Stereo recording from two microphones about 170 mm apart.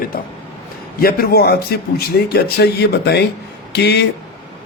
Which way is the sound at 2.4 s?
75° left (ahead or behind).